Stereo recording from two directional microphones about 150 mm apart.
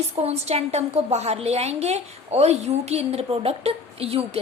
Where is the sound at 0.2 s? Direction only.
45° right (ahead or behind).